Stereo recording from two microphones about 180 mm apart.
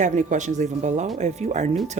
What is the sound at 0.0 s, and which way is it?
Speech, 45° right (ahead or behind).